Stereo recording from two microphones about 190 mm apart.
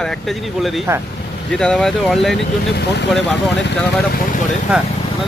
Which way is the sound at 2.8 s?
65° left (ahead or behind).